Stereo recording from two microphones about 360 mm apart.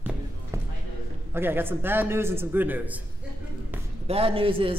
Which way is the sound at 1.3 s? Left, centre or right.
Centre.